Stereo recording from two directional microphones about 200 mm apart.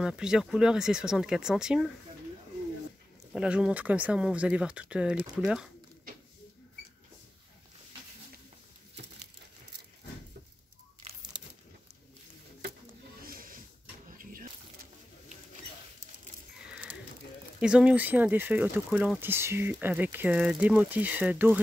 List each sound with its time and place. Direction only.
0.0 s speech: 5° right (ahead or behind)
3.3 s speech: 5° right (ahead or behind)
11.0 s crumpling: 30° right (ahead or behind)
13.2 s a sound: 45° right (ahead or behind)
14.0 s typewriter: 45° right (ahead or behind)
17.6 s speech: 5° right (ahead or behind)